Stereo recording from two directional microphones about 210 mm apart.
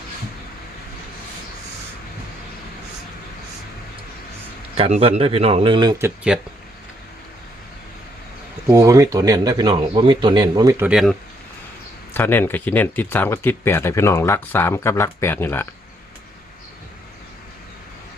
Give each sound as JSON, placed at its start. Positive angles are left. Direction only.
{"t": 4.8, "sound": "a man's voice", "side_deg": -30}
{"t": 6.0, "sound": "speech", "side_deg": -5}
{"t": 8.7, "sound": "a man's voice", "side_deg": -15}
{"t": 10.8, "sound": "speech", "side_deg": -5}
{"t": 12.1, "sound": "speech", "side_deg": 10}